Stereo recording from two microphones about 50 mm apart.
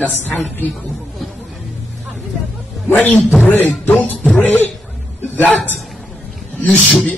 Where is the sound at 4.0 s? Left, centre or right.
Left.